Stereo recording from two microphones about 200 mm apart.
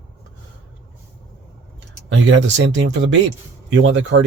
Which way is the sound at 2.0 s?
70° right (ahead or behind).